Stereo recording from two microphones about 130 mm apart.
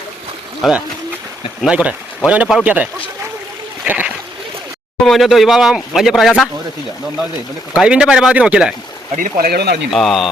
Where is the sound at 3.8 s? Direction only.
15° right (ahead or behind).